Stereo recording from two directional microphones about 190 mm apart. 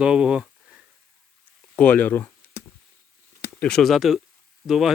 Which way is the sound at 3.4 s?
5° left (ahead or behind).